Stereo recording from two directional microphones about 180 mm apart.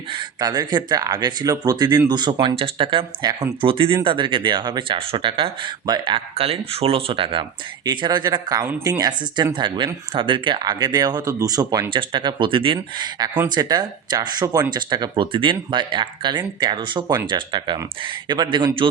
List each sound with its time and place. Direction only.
0.1 s speech: 25° right (ahead or behind)